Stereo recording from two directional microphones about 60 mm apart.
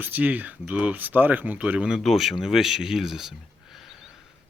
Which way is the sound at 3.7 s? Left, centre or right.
Centre.